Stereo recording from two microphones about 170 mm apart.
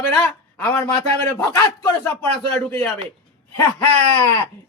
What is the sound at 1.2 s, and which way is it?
Speech, 20° left (ahead or behind).